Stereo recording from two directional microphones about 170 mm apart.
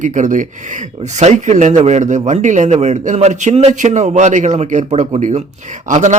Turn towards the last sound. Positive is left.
turn(degrees=-45)  # may be behind; listen again after turning